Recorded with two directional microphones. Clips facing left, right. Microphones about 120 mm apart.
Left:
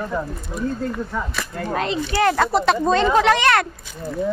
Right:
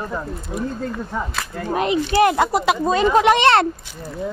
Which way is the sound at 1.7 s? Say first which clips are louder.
Right 4 dB; 15° right (ahead or behind).